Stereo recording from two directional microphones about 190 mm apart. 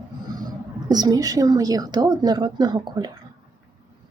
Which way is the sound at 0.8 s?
20° right (ahead or behind).